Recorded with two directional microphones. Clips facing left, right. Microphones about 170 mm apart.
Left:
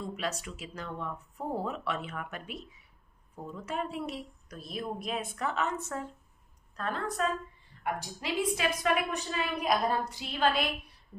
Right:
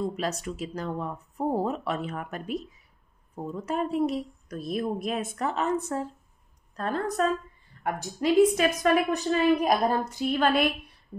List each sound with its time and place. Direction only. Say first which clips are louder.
0.0 s a woman's voice: right 6 dB; 40° right (ahead or behind)